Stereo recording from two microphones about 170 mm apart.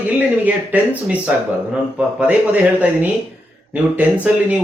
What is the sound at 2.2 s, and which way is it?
Speech, 10° right (ahead or behind).